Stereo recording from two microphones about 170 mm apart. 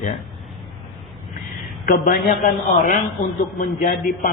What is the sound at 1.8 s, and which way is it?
A woman's voice, 55° left (ahead or behind).